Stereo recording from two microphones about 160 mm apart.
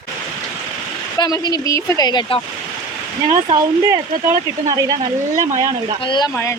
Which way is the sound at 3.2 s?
25° right (ahead or behind).